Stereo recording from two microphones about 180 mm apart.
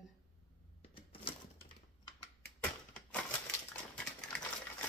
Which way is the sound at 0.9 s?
30° left (ahead or behind).